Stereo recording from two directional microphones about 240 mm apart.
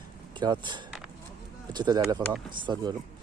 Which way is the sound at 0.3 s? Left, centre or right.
Centre.